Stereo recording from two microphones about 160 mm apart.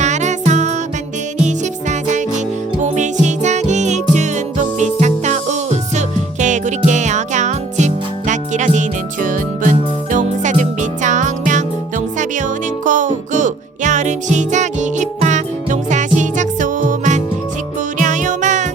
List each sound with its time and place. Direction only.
0.0 s music: 45° right (ahead or behind)